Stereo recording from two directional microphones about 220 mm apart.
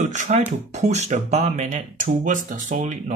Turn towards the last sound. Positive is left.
turn(degrees=-35)  # may be behind; listen again after turning